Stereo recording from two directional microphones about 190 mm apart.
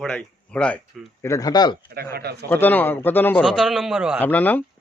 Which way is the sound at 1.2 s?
15° left (ahead or behind).